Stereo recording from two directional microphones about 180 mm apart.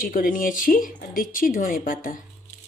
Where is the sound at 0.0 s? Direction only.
50° left (ahead or behind).